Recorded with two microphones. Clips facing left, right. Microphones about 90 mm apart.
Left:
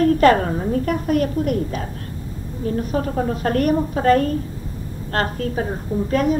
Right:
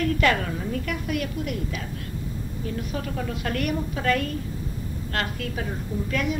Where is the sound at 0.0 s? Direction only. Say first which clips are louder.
Left 9 dB; 40° left (ahead or behind).